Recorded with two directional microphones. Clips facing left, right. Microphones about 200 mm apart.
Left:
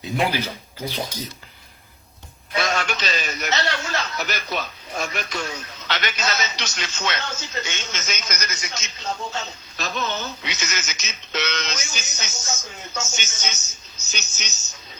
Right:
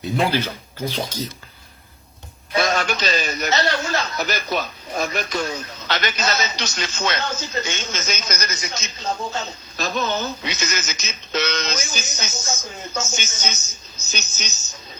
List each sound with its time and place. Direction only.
0.0 s speech: 15° left (ahead or behind)
2.6 s a man's voice: 40° right (ahead or behind)